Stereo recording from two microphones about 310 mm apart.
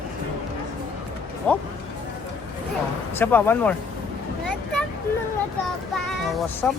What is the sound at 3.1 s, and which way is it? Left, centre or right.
Speech, centre.